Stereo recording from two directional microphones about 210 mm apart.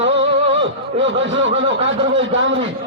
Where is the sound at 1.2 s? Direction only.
60° right (ahead or behind).